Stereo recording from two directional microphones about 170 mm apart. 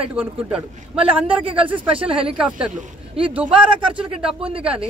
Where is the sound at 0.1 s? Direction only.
10° right (ahead or behind).